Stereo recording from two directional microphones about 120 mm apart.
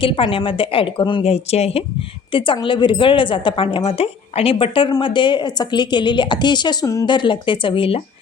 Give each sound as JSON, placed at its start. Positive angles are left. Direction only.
{"t": 0.0, "sound": "a woman's voice", "side_deg": 45}
{"t": 1.2, "sound": "speech", "side_deg": 60}
{"t": 2.3, "sound": "a woman's voice", "side_deg": 45}